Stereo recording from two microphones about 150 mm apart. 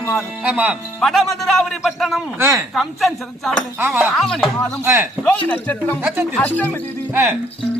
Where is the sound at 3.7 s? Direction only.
10° right (ahead or behind).